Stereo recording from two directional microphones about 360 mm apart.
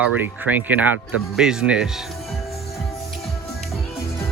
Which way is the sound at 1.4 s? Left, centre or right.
Centre.